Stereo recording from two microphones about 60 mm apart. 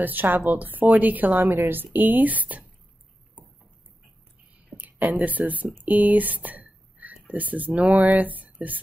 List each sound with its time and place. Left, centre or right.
0.0 s a woman's voice: right
4.7 s speech: right